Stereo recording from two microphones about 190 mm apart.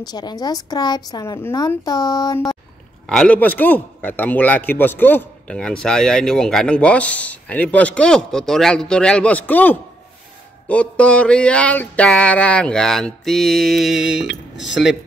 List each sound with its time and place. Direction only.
0.0 s a woman's voice: 20° left (ahead or behind)
3.1 s a man's voice: 5° left (ahead or behind)
10.7 s a sound: 5° left (ahead or behind)